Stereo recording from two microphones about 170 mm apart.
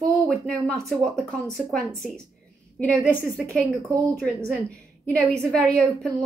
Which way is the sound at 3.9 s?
20° right (ahead or behind).